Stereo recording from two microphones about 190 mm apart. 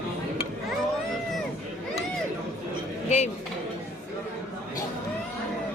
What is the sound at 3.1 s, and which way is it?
Speech, 35° left (ahead or behind).